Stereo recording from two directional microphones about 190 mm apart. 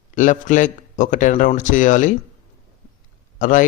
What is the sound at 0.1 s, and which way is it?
Speech, 40° left (ahead or behind).